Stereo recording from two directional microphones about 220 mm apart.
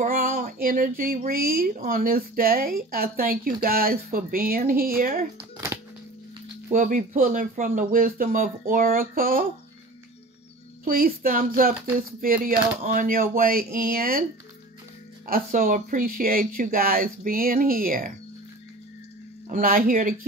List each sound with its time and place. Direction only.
0.0 s speech: 40° right (ahead or behind)
5.4 s music: 10° right (ahead or behind)
6.7 s speech: 35° right (ahead or behind)
10.8 s speech: 40° right (ahead or behind)
15.2 s speech: 40° right (ahead or behind)
19.5 s speech: 40° right (ahead or behind)